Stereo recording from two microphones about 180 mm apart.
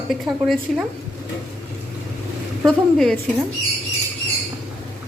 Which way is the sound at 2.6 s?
5° left (ahead or behind).